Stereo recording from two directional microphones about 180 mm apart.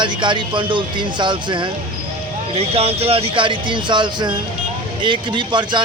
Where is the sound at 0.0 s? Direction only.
25° right (ahead or behind).